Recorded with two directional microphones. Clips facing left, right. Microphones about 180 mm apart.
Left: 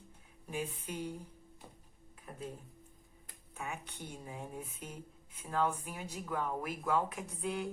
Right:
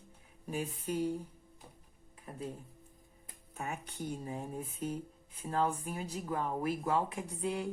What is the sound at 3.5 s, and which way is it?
Speech, 40° right (ahead or behind).